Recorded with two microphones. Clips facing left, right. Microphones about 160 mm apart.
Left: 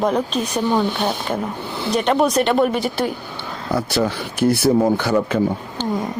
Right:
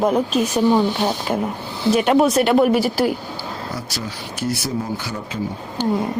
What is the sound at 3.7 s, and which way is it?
Speech, 60° left (ahead or behind).